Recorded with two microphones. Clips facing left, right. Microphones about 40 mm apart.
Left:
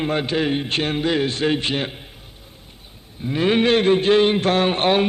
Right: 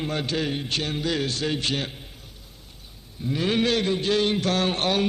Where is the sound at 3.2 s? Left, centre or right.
Left.